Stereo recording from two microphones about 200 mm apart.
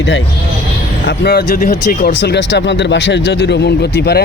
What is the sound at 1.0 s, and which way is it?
Speech, 50° left (ahead or behind).